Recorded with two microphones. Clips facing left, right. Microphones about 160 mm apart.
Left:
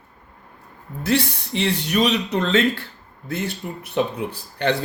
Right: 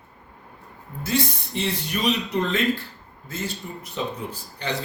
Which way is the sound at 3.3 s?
60° left (ahead or behind).